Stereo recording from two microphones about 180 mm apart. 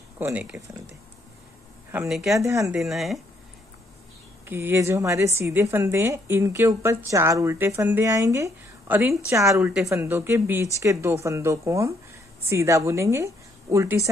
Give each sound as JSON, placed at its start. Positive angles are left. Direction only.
{"t": 0.2, "sound": "a woman's voice", "side_deg": -10}
{"t": 1.9, "sound": "speech", "side_deg": -5}
{"t": 2.4, "sound": "a woman's voice", "side_deg": -15}
{"t": 2.7, "sound": "speech", "side_deg": 0}
{"t": 4.5, "sound": "a woman's voice", "side_deg": -10}